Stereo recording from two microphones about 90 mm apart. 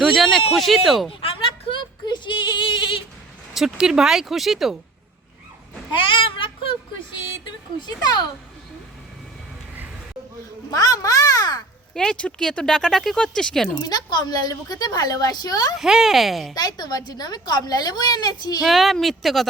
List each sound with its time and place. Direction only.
0.0 s speech: centre (ahead or behind)
1.2 s a sound: 85° left
1.8 s a sound: 55° left (ahead or behind)
3.5 s speech: 5° right (ahead or behind)
6.0 s a sound: 70° left (ahead or behind)
7.8 s a woman's voice: 45° left (ahead or behind)
10.7 s a sound: 45° left (ahead or behind)
11.9 s speech: 10° left (ahead or behind)
13.8 s a woman's voice: 50° left (ahead or behind)
15.8 s speech: 5° right (ahead or behind)
16.6 s a woman's voice: 45° left (ahead or behind)
18.6 s speech: centre (ahead or behind)